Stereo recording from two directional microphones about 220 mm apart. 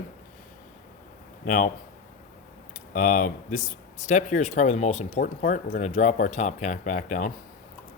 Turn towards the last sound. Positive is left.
turn(degrees=35)  # may be behind; listen again after turning